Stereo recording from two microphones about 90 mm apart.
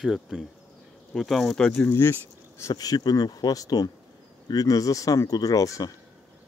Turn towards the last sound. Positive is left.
turn(degrees=40)  # may be behind; listen again after turning